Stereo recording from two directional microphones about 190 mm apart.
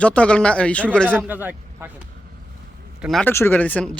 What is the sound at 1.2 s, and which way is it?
Speech, 10° right (ahead or behind).